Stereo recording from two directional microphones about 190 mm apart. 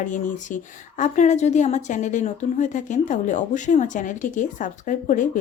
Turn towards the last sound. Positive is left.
turn(degrees=45)  # may be behind; listen again after turning